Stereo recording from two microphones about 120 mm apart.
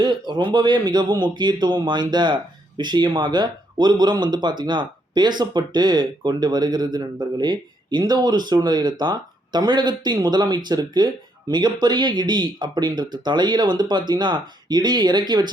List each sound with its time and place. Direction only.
0.0 s a man's voice: 40° right (ahead or behind)